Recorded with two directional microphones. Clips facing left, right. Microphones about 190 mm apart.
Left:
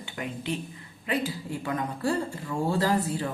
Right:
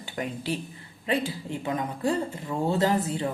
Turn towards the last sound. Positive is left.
turn(degrees=-25)  # may be behind; listen again after turning